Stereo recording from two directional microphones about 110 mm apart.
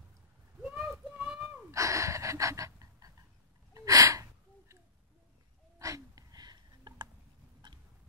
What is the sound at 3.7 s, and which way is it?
Gasp, 30° right (ahead or behind).